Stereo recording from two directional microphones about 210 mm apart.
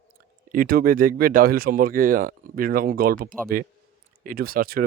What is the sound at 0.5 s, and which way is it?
Speech, 45° right (ahead or behind).